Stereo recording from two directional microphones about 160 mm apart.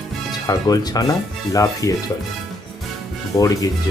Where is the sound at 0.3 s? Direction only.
25° left (ahead or behind).